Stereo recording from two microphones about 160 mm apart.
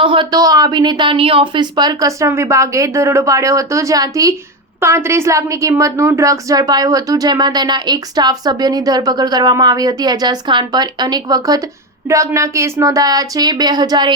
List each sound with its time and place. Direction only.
0.0 s a woman's voice: 30° right (ahead or behind)